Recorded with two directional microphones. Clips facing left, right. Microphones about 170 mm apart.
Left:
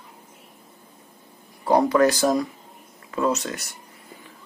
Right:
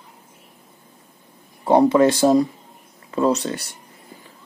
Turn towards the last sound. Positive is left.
turn(degrees=-30)  # may be behind; listen again after turning